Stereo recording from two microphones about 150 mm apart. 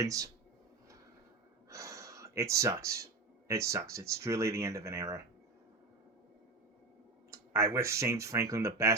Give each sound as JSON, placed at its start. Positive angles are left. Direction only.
{"t": 0.0, "sound": "speech", "side_deg": -20}
{"t": 1.7, "sound": "a sound", "side_deg": -20}
{"t": 3.5, "sound": "speech", "side_deg": -20}
{"t": 7.3, "sound": "speech", "side_deg": -20}